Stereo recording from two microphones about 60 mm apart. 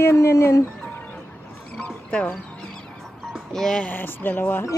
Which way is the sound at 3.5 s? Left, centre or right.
Centre.